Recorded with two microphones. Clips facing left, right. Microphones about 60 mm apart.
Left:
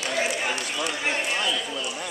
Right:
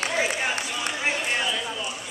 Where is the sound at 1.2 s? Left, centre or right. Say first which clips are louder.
Even; centre.